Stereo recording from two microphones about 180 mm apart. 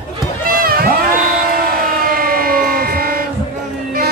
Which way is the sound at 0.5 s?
55° right (ahead or behind).